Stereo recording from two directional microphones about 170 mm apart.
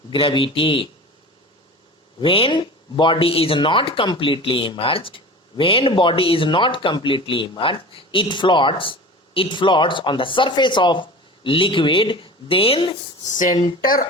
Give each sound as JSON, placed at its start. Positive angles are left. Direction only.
{"t": 0.1, "sound": "speech", "side_deg": 30}
{"t": 2.2, "sound": "speech", "side_deg": 30}